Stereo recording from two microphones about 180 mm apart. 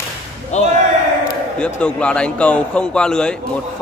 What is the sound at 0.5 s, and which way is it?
Speech, 40° left (ahead or behind).